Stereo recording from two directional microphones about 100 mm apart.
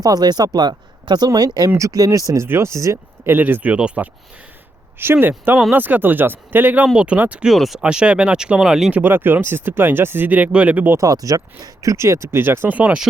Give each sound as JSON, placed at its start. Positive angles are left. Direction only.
{"t": 0.0, "sound": "speech", "side_deg": -40}
{"t": 3.3, "sound": "speech", "side_deg": -20}
{"t": 7.5, "sound": "speech", "side_deg": 0}
{"t": 9.0, "sound": "speech", "side_deg": -20}
{"t": 10.9, "sound": "speech", "side_deg": -35}